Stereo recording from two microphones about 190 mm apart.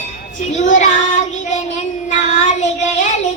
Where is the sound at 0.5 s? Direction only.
40° left (ahead or behind).